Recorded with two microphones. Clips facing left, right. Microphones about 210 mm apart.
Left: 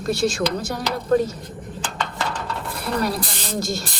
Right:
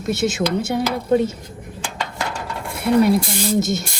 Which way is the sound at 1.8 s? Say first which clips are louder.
Even; 10° right (ahead or behind).